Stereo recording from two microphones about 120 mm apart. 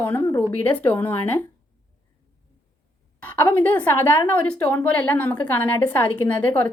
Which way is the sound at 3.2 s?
15° left (ahead or behind).